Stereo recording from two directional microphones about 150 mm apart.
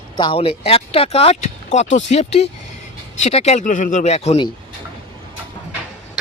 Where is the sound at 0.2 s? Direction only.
35° left (ahead or behind).